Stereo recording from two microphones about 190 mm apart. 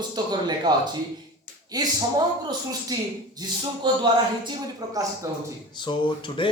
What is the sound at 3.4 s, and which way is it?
A man's voice, 20° right (ahead or behind).